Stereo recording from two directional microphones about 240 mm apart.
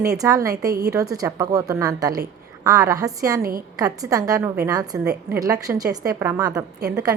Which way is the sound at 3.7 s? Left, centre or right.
Centre.